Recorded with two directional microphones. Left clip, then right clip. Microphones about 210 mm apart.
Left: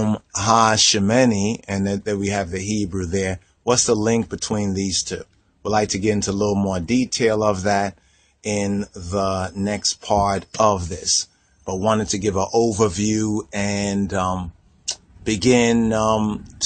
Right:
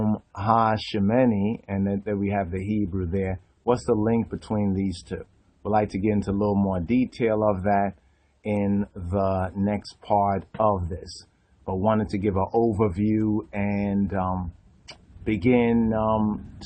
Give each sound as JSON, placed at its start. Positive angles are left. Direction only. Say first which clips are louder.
{"t": 0.0, "sound": "speech", "louder": "left 5 dB", "side_deg": 40}